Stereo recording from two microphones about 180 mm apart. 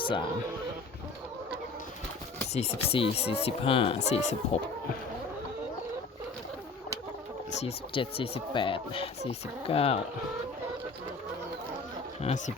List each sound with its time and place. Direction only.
2.5 s speech: 35° left (ahead or behind)
7.5 s speech: 35° left (ahead or behind)
12.2 s speech: 40° left (ahead or behind)